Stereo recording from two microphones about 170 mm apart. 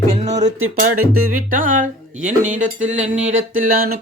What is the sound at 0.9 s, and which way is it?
Music, 55° right (ahead or behind).